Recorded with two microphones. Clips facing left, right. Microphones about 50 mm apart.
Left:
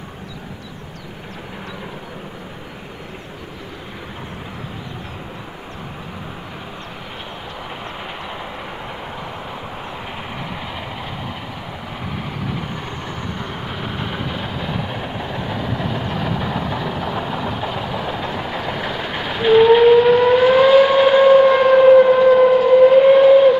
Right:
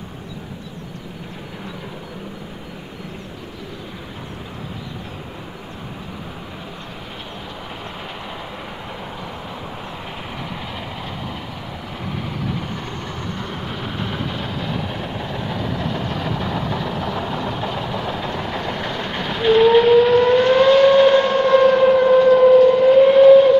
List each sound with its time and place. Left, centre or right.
12.4 s vehicle: centre